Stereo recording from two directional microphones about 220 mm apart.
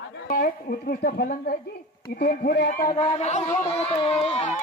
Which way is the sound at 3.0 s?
25° left (ahead or behind).